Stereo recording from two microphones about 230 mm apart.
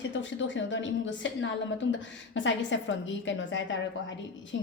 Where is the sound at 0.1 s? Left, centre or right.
Left.